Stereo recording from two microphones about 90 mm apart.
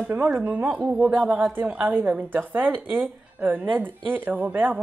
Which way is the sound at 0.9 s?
15° right (ahead or behind).